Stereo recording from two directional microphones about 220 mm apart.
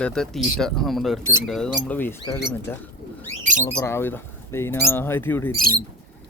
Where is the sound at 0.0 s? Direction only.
5° left (ahead or behind).